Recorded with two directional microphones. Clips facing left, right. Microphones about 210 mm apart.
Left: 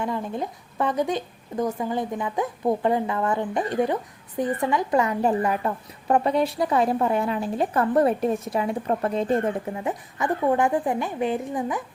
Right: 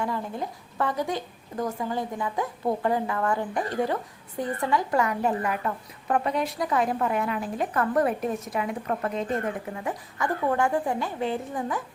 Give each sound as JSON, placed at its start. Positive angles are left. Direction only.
{"t": 0.0, "sound": "a woman's voice", "side_deg": 20}